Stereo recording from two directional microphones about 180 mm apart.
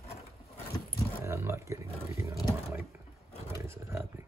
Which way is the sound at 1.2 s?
15° right (ahead or behind).